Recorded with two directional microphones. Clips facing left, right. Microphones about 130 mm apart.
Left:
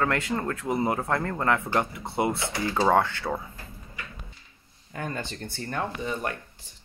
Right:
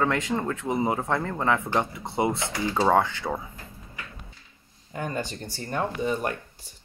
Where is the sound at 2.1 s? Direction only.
20° right (ahead or behind).